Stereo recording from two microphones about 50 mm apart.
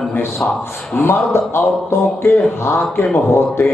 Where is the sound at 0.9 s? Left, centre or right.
Left.